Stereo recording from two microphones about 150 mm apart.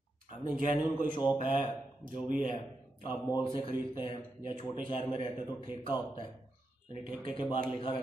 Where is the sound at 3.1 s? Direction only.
30° left (ahead or behind).